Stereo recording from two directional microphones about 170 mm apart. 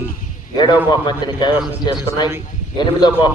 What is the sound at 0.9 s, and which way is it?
A man's voice, 25° left (ahead or behind).